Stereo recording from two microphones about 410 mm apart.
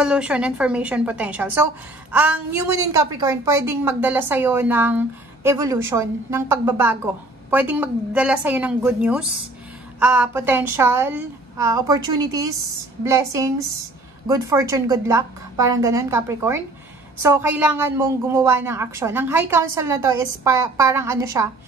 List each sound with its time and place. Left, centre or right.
0.0 s a woman's voice: centre
14.2 s a woman's voice: centre